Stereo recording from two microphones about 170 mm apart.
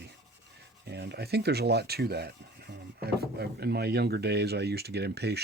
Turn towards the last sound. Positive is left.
turn(degrees=-75)  # may be behind; listen again after turning